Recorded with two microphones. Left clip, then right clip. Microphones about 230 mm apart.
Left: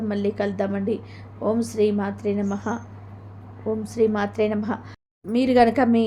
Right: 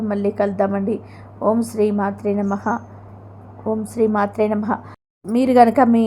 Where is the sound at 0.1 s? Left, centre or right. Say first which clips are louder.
Right 6 dB; centre.